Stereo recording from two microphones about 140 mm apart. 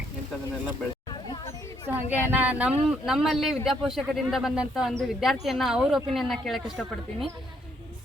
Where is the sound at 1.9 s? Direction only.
10° right (ahead or behind).